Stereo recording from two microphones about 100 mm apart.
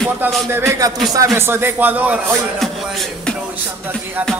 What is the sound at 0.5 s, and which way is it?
Speech, 25° right (ahead or behind).